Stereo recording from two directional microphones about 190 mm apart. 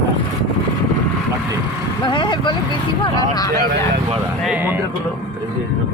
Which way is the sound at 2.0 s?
25° left (ahead or behind).